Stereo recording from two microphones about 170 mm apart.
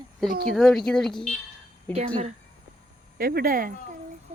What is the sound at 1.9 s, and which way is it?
Speech, 40° right (ahead or behind).